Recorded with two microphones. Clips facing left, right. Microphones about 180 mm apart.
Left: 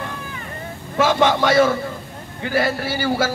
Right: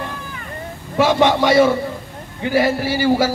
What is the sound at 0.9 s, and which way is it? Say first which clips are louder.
A man's voice: right 2 dB; 10° right (ahead or behind).